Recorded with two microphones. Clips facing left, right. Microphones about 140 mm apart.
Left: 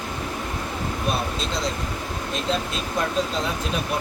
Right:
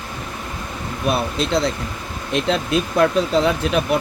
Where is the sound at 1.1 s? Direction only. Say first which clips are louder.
Right 8 dB; 65° right (ahead or behind).